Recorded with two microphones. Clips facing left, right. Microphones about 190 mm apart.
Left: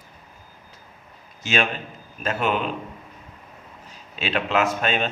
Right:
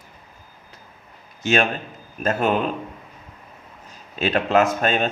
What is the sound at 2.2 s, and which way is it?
Speech, 45° right (ahead or behind).